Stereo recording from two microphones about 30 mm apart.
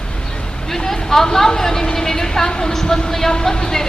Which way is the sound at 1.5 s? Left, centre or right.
Centre.